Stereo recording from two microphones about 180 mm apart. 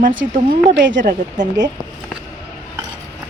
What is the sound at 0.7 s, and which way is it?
Speech, 85° right.